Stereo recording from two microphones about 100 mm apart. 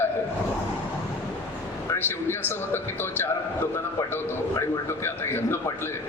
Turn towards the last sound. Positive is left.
turn(degrees=25)  # may be behind; listen again after turning